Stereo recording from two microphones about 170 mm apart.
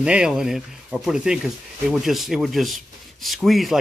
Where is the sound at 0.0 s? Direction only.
5° right (ahead or behind).